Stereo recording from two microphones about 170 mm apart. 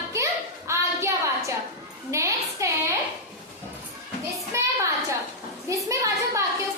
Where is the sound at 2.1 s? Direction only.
20° right (ahead or behind).